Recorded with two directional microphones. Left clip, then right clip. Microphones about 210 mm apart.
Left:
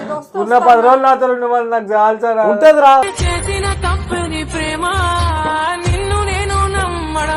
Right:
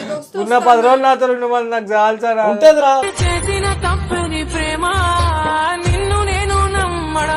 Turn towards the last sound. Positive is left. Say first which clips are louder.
# even
turn(degrees=0)  # may be behind; listen again after turning